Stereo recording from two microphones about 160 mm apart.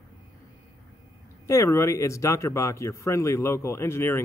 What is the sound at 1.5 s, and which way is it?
Speech, 15° left (ahead or behind).